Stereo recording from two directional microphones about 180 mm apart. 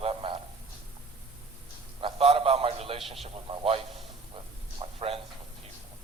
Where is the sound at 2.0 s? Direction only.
30° right (ahead or behind).